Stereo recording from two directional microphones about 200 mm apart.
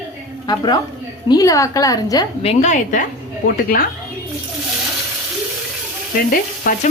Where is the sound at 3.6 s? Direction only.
45° left (ahead or behind).